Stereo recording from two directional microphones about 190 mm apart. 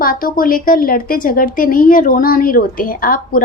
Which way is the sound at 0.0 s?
45° left (ahead or behind).